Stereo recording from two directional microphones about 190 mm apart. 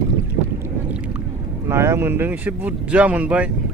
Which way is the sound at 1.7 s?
15° right (ahead or behind).